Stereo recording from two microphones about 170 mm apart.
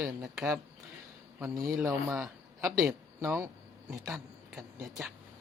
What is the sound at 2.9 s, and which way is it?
Speech, 15° right (ahead or behind).